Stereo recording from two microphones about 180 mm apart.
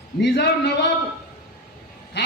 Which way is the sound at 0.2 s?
70° left (ahead or behind).